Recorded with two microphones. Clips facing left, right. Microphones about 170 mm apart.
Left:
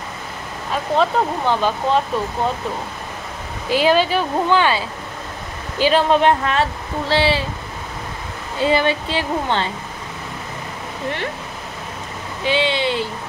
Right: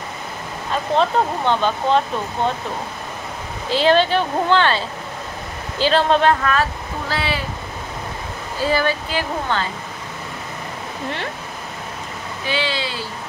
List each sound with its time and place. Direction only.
0.9 s speech: 5° left (ahead or behind)
3.7 s speech: 10° left (ahead or behind)
6.4 s speech: 25° left (ahead or behind)
8.5 s speech: 25° left (ahead or behind)
12.4 s speech: 25° left (ahead or behind)